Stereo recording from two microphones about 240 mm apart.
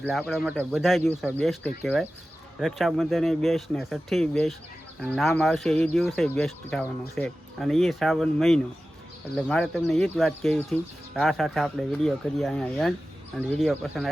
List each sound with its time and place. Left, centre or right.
0.0 s speech: centre